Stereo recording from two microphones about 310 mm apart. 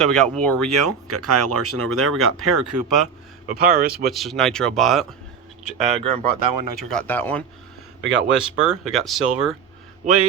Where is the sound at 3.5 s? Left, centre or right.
Right.